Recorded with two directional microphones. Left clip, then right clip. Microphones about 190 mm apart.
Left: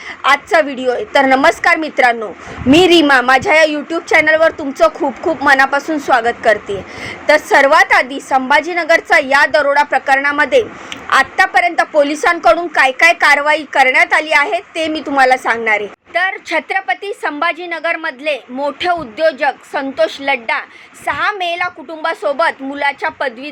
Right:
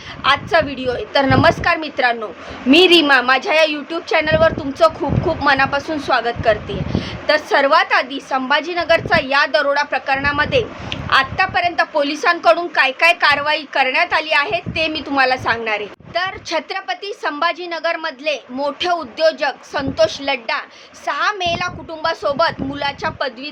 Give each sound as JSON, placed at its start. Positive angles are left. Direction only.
{"t": 0.2, "sound": "a woman's voice", "side_deg": 25}
{"t": 16.1, "sound": "a woman's voice", "side_deg": 10}